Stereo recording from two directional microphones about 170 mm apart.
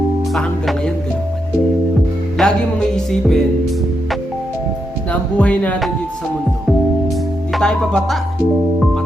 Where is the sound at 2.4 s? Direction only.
5° left (ahead or behind).